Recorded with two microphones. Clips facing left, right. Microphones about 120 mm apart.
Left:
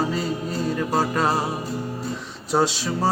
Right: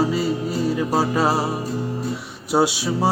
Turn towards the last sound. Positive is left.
turn(degrees=-10)  # may be behind; listen again after turning